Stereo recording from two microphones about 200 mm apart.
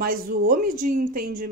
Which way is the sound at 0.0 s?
45° right (ahead or behind).